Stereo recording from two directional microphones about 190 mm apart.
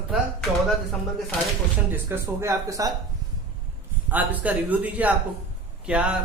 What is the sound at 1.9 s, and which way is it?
A man's voice, 15° right (ahead or behind).